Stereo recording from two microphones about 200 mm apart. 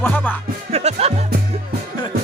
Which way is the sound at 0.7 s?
30° right (ahead or behind).